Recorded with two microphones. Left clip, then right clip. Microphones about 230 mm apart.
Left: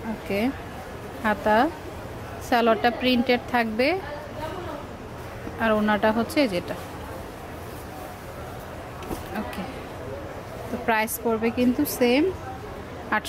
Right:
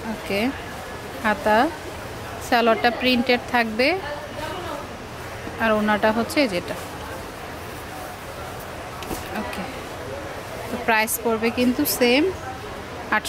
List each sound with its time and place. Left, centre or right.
0.3 s a woman's voice: centre
5.6 s a woman's voice: centre
10.9 s a woman's voice: centre